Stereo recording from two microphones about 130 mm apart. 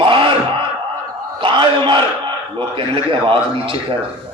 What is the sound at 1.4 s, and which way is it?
A man's voice, 40° right (ahead or behind).